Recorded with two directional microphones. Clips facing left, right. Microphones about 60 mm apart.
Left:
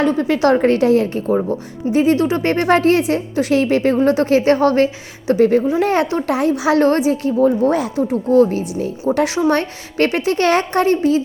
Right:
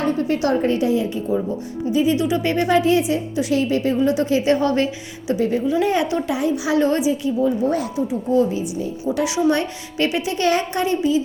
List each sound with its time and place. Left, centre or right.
0.0 s a woman's voice: left
1.9 s a woman's voice: left
2.1 s a woman's voice: left
4.4 s a woman's voice: left
5.3 s a woman's voice: left
5.8 s a woman's voice: left
6.1 s a child's voice: left
6.3 s a woman's voice: left
7.6 s a woman's voice: left
8.0 s a woman's voice: left